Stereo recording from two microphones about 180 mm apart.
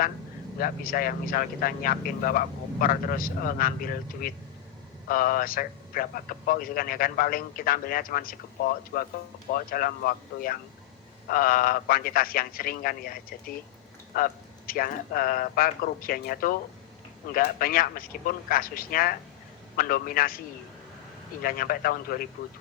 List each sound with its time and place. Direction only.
0.6 s a man's voice: 55° left (ahead or behind)
14.1 s a man's voice: 50° left (ahead or behind)
21.4 s a man's voice: 55° left (ahead or behind)